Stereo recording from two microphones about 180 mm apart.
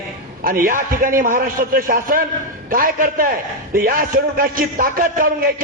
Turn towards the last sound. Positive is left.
turn(degrees=-55)  # may be behind; listen again after turning